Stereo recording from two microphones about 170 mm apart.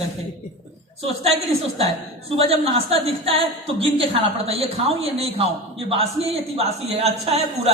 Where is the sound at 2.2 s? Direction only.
35° right (ahead or behind).